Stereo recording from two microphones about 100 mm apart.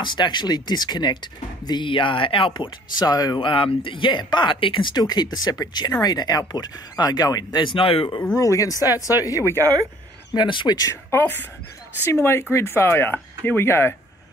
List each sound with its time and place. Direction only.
0.0 s speech: 50° left (ahead or behind)
3.3 s speech: 65° left (ahead or behind)
8.4 s speech: 35° left (ahead or behind)
10.3 s speech: 50° left (ahead or behind)
10.8 s speech: 30° left (ahead or behind)